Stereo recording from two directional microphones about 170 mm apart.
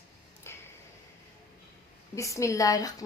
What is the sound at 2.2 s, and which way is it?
Speech, 20° left (ahead or behind).